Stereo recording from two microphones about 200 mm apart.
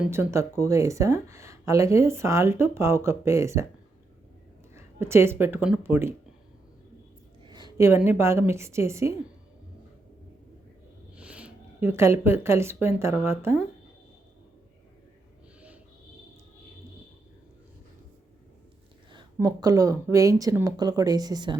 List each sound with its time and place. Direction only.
0.0 s speech: 10° right (ahead or behind)
4.7 s speech: 15° right (ahead or behind)
7.4 s a woman's voice: 20° right (ahead or behind)
11.2 s speech: 5° right (ahead or behind)
19.1 s speech: 20° right (ahead or behind)